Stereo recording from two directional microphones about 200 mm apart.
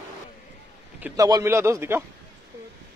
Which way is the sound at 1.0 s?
10° right (ahead or behind).